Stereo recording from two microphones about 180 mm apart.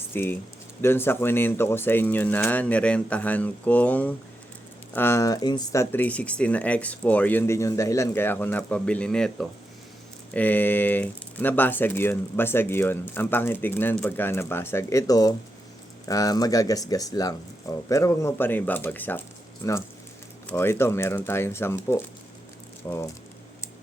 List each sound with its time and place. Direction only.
0.1 s speech: 10° left (ahead or behind)
20.5 s speech: 15° left (ahead or behind)